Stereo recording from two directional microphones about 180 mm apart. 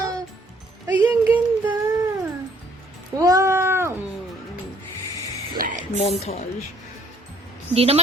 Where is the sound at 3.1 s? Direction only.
20° right (ahead or behind).